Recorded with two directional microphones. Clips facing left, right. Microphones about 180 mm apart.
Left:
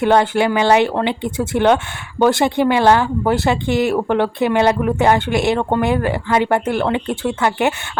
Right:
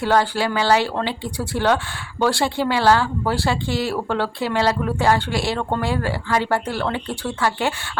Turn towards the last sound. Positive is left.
turn(degrees=20)  # may be behind; listen again after turning